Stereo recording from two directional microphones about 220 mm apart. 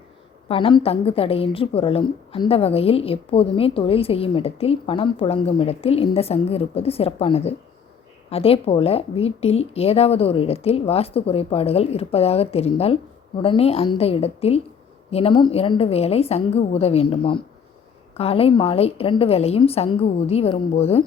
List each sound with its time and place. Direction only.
0.4 s a woman's voice: 25° left (ahead or behind)